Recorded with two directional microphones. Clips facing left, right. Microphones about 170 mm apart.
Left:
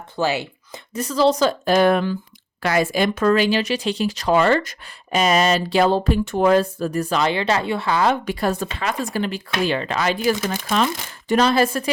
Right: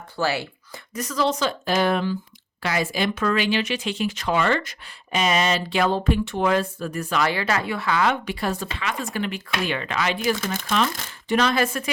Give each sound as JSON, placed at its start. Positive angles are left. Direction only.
{"t": 0.2, "sound": "speech", "side_deg": 20}